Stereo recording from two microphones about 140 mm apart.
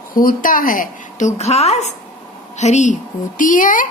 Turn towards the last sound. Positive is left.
turn(degrees=70)  # may be behind; listen again after turning